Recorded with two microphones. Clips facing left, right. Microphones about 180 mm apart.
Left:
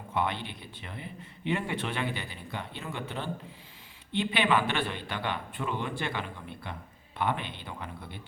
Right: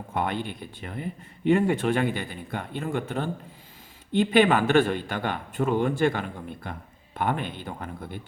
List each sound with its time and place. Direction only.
0.1 s speech: 45° right (ahead or behind)